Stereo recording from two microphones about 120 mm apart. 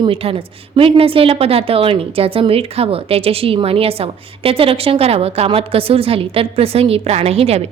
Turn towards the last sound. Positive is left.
turn(degrees=-60)  # may be behind; listen again after turning